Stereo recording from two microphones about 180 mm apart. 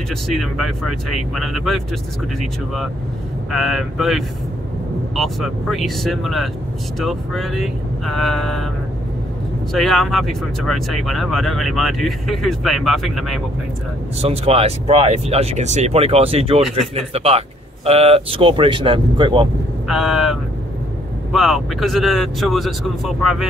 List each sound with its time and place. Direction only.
0.1 s speech: centre (ahead or behind)
3.5 s speech: centre (ahead or behind)
9.7 s speech: centre (ahead or behind)
14.2 s speech: 35° right (ahead or behind)
19.9 s speech: centre (ahead or behind)